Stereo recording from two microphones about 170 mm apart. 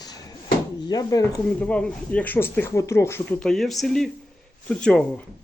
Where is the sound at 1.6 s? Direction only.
5° left (ahead or behind).